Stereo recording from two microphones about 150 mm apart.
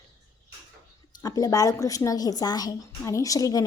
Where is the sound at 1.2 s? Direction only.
25° left (ahead or behind).